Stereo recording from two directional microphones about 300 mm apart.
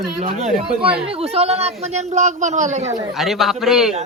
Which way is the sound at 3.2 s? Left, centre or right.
Centre.